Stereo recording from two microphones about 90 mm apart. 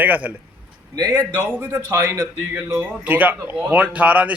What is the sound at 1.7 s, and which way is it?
A man's voice, 30° right (ahead or behind).